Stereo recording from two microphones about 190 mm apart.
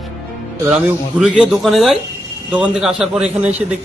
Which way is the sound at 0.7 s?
5° right (ahead or behind).